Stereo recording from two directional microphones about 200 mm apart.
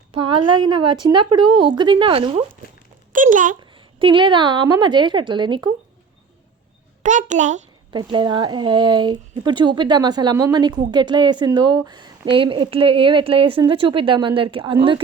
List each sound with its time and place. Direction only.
0.1 s speech: 25° right (ahead or behind)
3.1 s a sound: 40° right (ahead or behind)
3.6 s speech: 25° right (ahead or behind)
7.0 s a child's voice: 40° right (ahead or behind)
7.9 s speech: 20° right (ahead or behind)